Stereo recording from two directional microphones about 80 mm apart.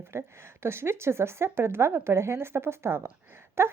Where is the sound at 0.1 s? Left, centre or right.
Right.